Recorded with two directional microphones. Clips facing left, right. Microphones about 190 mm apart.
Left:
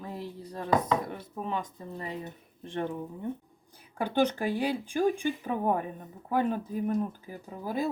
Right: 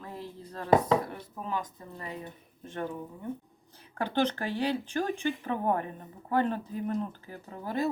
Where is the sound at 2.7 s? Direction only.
25° left (ahead or behind).